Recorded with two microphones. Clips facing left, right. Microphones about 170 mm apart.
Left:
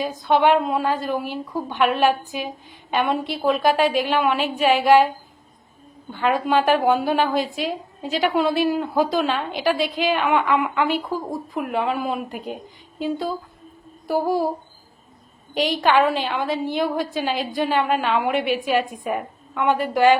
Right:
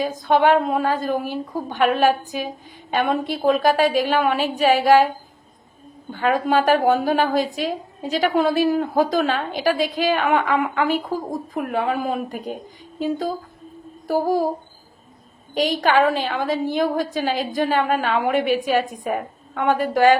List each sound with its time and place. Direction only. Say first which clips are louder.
0.0 s a woman's voice: right 1 dB; 45° right (ahead or behind)
6.1 s a woman's voice: right 1 dB; 45° right (ahead or behind)
15.5 s a woman's voice: even; 40° right (ahead or behind)